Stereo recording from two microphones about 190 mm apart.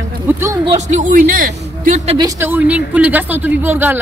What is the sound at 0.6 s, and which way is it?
Speech, 35° right (ahead or behind).